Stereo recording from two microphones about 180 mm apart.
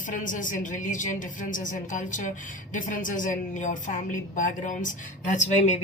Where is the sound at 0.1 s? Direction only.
45° left (ahead or behind).